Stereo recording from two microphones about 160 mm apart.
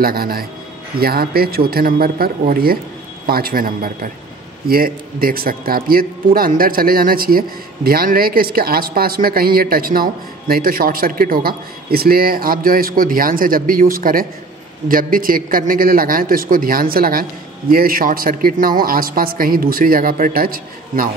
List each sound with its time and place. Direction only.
0.0 s a man's voice: 65° right (ahead or behind)